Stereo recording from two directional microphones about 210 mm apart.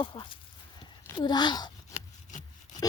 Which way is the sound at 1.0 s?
20° left (ahead or behind).